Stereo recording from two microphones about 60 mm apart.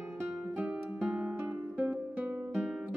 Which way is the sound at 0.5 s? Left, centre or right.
Right.